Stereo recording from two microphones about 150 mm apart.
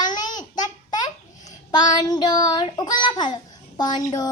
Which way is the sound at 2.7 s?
30° left (ahead or behind).